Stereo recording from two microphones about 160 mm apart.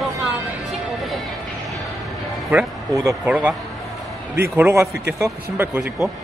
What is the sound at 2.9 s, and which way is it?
Speech, 20° right (ahead or behind).